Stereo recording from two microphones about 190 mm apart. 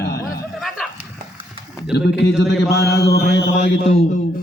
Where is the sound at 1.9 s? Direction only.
65° left (ahead or behind).